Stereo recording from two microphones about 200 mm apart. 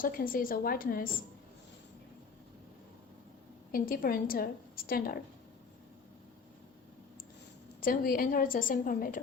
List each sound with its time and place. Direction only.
0.0 s a woman's voice: 45° left (ahead or behind)
3.7 s a woman's voice: 45° left (ahead or behind)
7.8 s a woman's voice: 45° left (ahead or behind)